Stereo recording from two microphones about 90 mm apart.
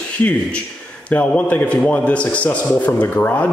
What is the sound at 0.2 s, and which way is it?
A man's voice, 15° left (ahead or behind).